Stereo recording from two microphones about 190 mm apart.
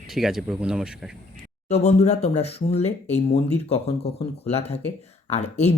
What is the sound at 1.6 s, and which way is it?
Speech, 35° left (ahead or behind).